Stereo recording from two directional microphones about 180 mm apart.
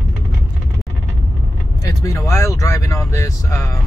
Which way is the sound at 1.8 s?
15° left (ahead or behind).